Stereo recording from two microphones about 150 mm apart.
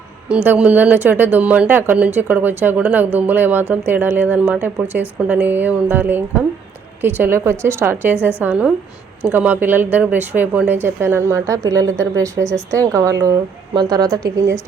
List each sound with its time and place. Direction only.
0.3 s speech: 10° right (ahead or behind)